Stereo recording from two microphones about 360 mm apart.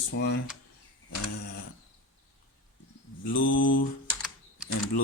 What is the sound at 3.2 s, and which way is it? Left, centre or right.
Mantra, left.